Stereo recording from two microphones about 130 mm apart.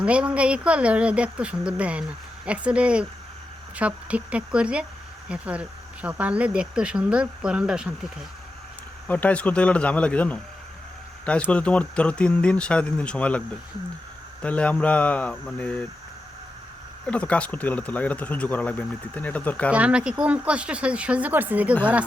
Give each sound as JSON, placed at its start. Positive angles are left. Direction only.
{"t": 0.0, "sound": "speech", "side_deg": -10}
{"t": 9.0, "sound": "speech", "side_deg": 10}
{"t": 14.4, "sound": "speech", "side_deg": 10}
{"t": 17.1, "sound": "speech", "side_deg": 10}
{"t": 19.7, "sound": "speech", "side_deg": -10}